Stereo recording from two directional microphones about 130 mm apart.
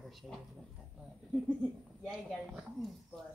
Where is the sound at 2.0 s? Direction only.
5° right (ahead or behind).